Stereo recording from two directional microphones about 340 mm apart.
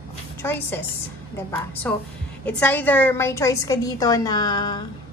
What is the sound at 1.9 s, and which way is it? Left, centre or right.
A woman's voice, centre.